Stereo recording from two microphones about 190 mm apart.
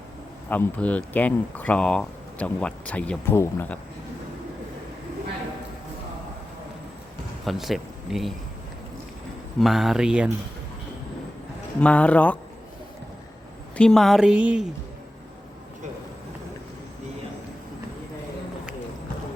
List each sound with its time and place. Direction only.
0.5 s speech: 10° left (ahead or behind)
7.4 s speech: centre (ahead or behind)
9.6 s speech: centre (ahead or behind)
11.8 s speech: 5° left (ahead or behind)
13.7 s speech: 5° left (ahead or behind)